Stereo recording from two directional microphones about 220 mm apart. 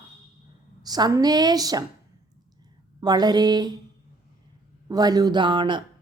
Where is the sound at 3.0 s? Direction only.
20° right (ahead or behind).